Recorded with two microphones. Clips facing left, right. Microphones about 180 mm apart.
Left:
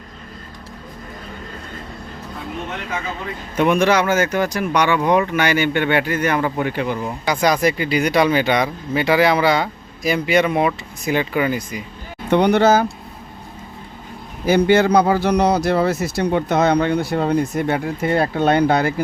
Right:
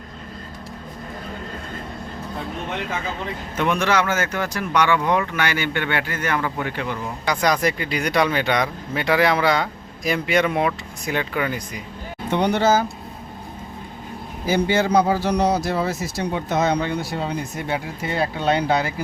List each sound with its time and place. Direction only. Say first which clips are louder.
3.6 s speech: left 5 dB; 15° left (ahead or behind)
7.3 s speech: left 3 dB; 5° left (ahead or behind)
12.3 s a man's voice: left 5 dB; 60° left (ahead or behind)
14.4 s a man's voice: left 6 dB; 65° left (ahead or behind)